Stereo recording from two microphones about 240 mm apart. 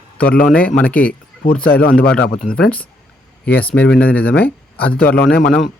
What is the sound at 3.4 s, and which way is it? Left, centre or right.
Speech, centre.